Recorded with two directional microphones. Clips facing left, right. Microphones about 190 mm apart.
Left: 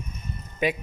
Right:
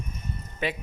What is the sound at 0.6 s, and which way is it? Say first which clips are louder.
Speech: left 5 dB; 15° left (ahead or behind).